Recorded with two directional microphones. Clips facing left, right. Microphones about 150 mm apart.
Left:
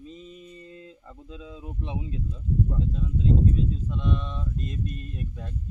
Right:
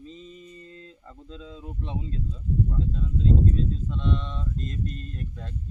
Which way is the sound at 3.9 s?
10° left (ahead or behind).